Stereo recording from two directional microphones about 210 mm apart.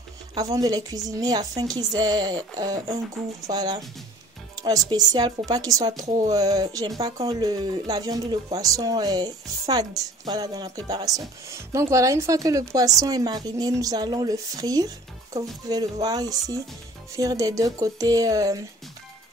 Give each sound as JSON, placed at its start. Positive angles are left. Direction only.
{"t": 0.3, "sound": "speech", "side_deg": -15}
{"t": 4.8, "sound": "speech", "side_deg": -20}